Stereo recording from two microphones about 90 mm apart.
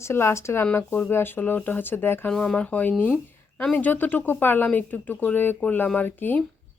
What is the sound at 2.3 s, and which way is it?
Speech, 5° left (ahead or behind).